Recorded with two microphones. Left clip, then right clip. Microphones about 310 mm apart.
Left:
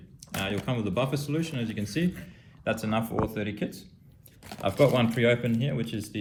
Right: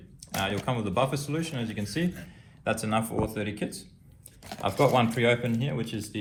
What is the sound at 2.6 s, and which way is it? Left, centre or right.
A man's voice, centre.